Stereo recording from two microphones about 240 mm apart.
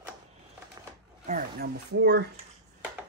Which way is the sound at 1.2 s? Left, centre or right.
Right.